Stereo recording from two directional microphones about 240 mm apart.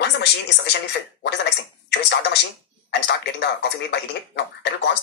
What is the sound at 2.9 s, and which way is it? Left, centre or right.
Speech, left.